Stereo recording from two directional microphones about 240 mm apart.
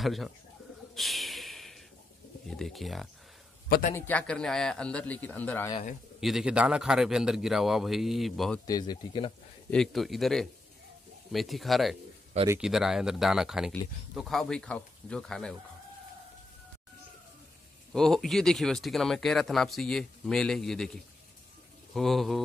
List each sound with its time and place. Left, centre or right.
0.0 s speech: centre
0.9 s a sound: centre
2.4 s speech: centre
3.6 s a man's voice: left
3.9 s speech: centre
6.2 s speech: centre
8.6 s speech: centre
9.7 s speech: centre
17.9 s speech: centre